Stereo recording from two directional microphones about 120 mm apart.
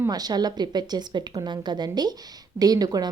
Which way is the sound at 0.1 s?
35° right (ahead or behind).